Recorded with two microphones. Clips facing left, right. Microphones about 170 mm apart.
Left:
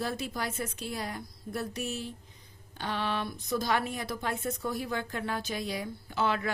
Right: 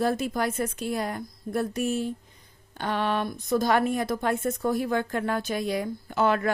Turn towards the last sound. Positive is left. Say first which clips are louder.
# right 6 dB
turn(degrees=-50)  # may be behind; listen again after turning